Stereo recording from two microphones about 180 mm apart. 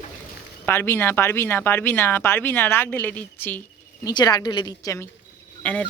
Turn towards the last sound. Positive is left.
turn(degrees=10)  # may be behind; listen again after turning